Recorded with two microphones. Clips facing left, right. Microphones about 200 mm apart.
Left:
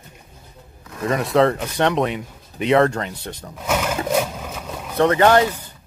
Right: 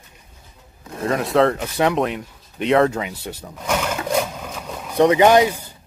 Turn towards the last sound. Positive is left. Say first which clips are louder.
# right 2 dB
turn(degrees=-10)  # may be behind; listen again after turning